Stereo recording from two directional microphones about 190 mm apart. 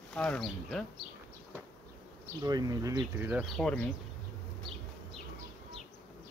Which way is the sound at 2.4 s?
20° right (ahead or behind).